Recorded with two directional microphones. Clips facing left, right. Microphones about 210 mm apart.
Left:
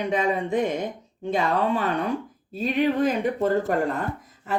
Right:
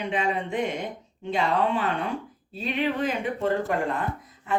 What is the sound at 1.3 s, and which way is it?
Speech, 40° left (ahead or behind).